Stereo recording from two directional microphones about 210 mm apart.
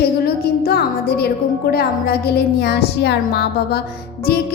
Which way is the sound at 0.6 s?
45° left (ahead or behind).